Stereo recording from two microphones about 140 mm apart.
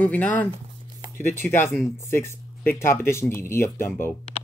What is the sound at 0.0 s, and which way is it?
Speech, 10° left (ahead or behind).